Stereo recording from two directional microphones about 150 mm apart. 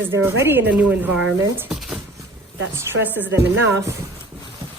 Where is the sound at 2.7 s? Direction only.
10° right (ahead or behind).